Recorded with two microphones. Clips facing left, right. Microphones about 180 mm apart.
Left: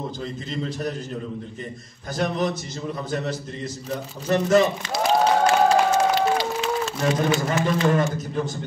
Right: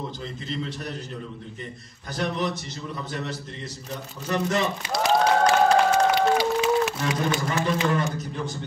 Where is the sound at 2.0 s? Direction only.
45° left (ahead or behind).